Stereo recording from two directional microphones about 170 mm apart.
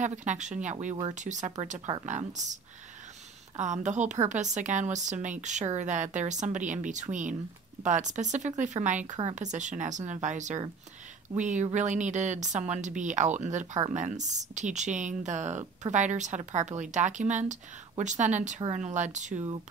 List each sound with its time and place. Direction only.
0.0 s speech: 45° right (ahead or behind)